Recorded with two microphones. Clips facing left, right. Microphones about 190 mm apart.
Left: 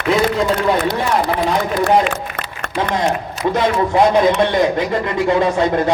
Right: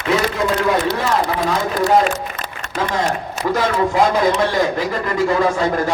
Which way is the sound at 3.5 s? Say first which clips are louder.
Left 2 dB; 25° left (ahead or behind).